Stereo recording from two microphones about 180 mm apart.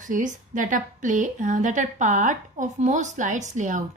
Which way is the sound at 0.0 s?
45° right (ahead or behind).